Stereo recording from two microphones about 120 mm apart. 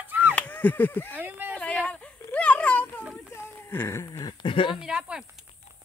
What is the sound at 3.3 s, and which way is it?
Speech, 20° left (ahead or behind).